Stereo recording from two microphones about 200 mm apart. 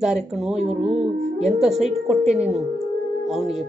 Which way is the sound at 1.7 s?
35° right (ahead or behind).